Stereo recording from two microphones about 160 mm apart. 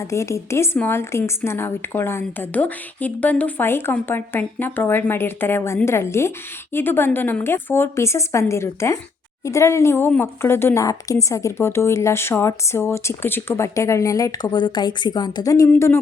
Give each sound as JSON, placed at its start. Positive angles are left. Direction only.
{"t": 0.0, "sound": "a woman's voice", "side_deg": 20}